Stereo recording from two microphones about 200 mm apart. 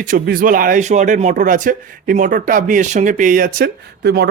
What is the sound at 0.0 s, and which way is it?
Speech, 45° right (ahead or behind).